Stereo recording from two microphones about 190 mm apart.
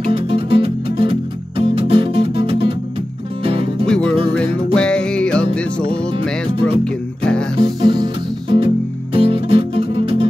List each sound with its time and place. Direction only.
0.1 s music: 30° right (ahead or behind)
3.8 s music: 5° left (ahead or behind)
7.5 s music: 25° right (ahead or behind)